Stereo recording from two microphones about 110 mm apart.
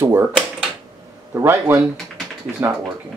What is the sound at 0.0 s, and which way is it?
Typewriter, 25° right (ahead or behind).